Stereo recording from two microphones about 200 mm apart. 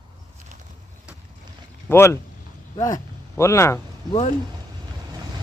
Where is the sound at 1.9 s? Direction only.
10° left (ahead or behind).